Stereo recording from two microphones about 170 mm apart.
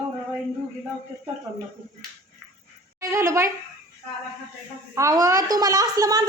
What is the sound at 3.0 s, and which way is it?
Speech, 15° right (ahead or behind).